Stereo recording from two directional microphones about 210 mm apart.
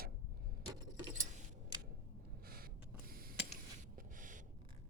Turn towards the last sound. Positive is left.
turn(degrees=-40)  # may be behind; listen again after turning